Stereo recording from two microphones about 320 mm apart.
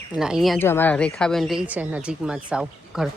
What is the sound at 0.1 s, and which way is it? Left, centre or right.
A woman's voice, centre.